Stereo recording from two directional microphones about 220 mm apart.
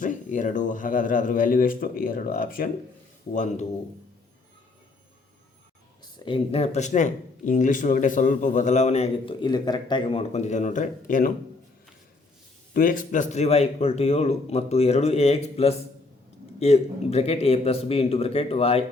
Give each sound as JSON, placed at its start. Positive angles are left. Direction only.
{"t": 0.0, "sound": "speech", "side_deg": 35}
{"t": 6.1, "sound": "speech", "side_deg": 20}
{"t": 12.7, "sound": "a man's voice", "side_deg": 40}